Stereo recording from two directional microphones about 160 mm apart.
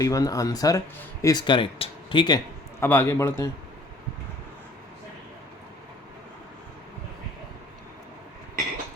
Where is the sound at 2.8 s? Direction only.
15° left (ahead or behind).